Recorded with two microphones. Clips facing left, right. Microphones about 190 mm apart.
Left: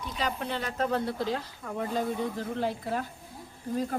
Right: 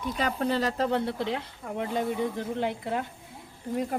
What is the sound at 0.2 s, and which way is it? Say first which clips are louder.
Speech: right 5 dB; 40° right (ahead or behind).